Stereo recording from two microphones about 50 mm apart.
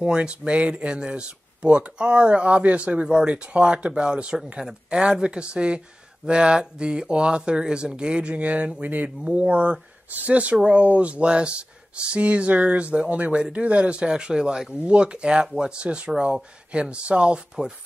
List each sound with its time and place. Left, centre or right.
0.0 s speech: centre